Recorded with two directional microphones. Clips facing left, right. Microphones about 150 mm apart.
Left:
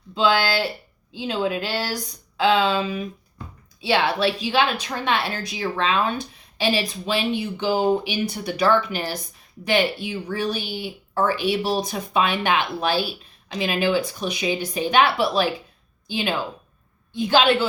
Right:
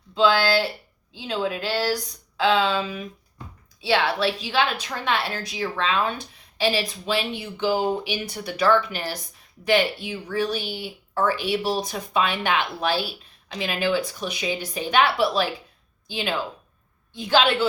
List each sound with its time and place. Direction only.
0.1 s a woman's voice: 15° left (ahead or behind)